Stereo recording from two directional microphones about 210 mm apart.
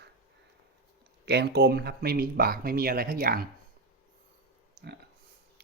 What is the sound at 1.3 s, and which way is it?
Speech, 50° right (ahead or behind).